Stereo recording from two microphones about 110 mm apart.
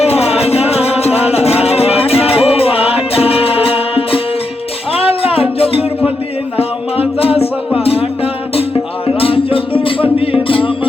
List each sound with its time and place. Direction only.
0.0 s music: 70° left (ahead or behind); by 10.8 s 55° left (ahead or behind)